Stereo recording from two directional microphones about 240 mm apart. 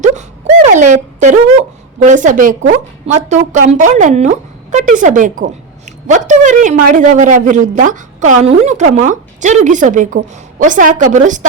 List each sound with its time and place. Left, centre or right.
0.0 s a woman's voice: right